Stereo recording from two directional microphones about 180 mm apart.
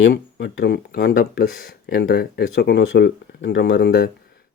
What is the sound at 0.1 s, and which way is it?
Speech, 70° left (ahead or behind).